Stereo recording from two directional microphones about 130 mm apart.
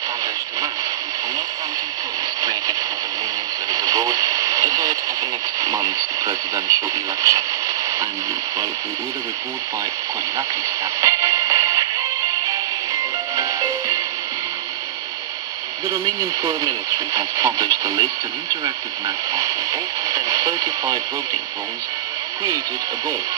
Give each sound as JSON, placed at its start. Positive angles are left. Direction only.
{"t": 3.7, "sound": "radio", "side_deg": -25}
{"t": 11.0, "sound": "music", "side_deg": -25}
{"t": 13.4, "sound": "music", "side_deg": -25}
{"t": 15.9, "sound": "speech", "side_deg": -25}